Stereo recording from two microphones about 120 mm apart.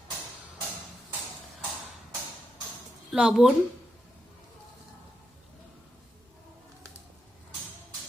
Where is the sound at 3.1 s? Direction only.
5° right (ahead or behind).